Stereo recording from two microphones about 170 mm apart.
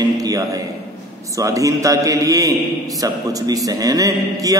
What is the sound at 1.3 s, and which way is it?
A man's voice, 20° right (ahead or behind).